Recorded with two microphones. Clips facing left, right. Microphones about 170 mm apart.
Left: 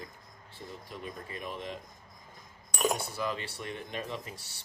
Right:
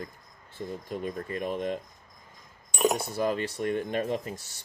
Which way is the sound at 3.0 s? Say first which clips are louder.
Right 7 dB; 45° right (ahead or behind).